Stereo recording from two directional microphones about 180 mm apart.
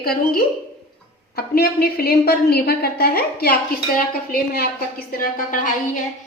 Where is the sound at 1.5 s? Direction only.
60° left (ahead or behind).